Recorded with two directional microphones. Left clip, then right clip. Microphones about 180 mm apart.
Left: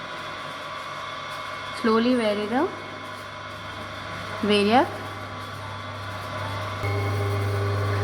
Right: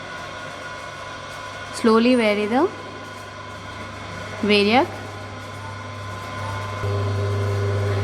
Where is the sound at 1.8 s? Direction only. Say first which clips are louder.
Right 5 dB; 20° right (ahead or behind).